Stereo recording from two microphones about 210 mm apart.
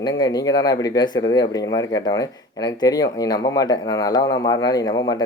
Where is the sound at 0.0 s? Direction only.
20° left (ahead or behind).